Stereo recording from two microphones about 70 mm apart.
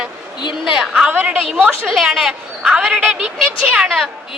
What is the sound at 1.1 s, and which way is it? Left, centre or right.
Speech, right.